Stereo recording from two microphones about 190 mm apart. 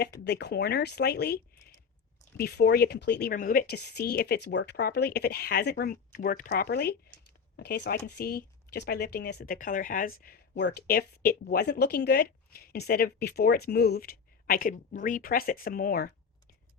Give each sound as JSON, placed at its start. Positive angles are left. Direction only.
{"t": 0.3, "sound": "a woman's voice", "side_deg": 60}
{"t": 2.4, "sound": "a woman's voice", "side_deg": 60}
{"t": 6.5, "sound": "a woman's voice", "side_deg": 55}